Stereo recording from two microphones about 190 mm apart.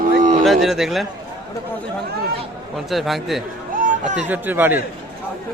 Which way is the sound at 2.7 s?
Centre (ahead or behind).